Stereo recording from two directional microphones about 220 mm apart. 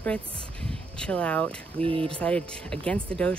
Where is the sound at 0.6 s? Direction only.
5° left (ahead or behind).